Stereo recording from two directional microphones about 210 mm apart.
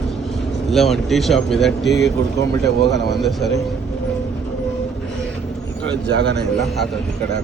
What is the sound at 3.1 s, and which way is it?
Speech, centre (ahead or behind).